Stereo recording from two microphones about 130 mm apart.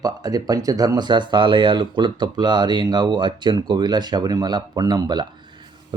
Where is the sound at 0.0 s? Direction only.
30° right (ahead or behind).